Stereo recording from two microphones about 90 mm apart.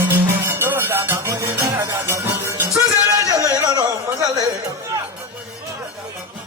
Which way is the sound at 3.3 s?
45° right (ahead or behind).